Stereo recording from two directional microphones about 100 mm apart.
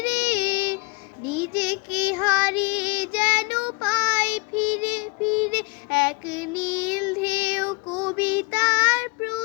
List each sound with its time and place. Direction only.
0.0 s child singing: 15° right (ahead or behind)